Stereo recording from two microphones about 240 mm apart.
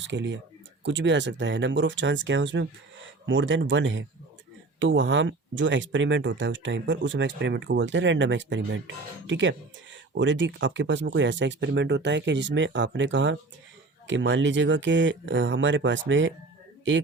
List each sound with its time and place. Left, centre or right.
0.0 s speech: right